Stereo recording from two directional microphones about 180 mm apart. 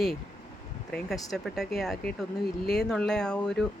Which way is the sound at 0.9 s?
Centre (ahead or behind).